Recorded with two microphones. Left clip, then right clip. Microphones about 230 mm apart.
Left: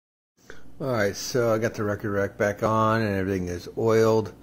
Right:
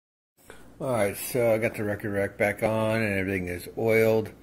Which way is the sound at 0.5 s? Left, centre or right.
Left.